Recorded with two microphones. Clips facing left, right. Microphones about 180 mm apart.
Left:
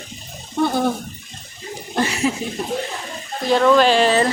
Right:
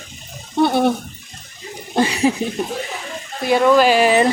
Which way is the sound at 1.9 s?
15° right (ahead or behind).